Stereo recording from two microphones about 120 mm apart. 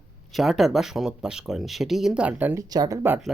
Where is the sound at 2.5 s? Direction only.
35° right (ahead or behind).